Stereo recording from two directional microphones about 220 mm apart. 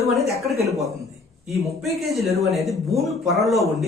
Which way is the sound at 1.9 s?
Centre (ahead or behind).